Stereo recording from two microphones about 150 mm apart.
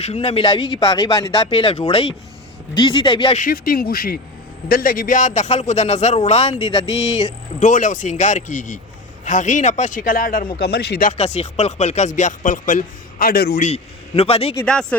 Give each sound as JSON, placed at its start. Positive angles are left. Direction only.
{"t": 0.0, "sound": "speech", "side_deg": 45}
{"t": 3.3, "sound": "speech", "side_deg": 70}
{"t": 7.6, "sound": "speech", "side_deg": 55}
{"t": 10.6, "sound": "speech", "side_deg": 90}
{"t": 11.2, "sound": "speech", "side_deg": 45}
{"t": 13.6, "sound": "a man's voice", "side_deg": 45}
{"t": 14.5, "sound": "speech", "side_deg": 5}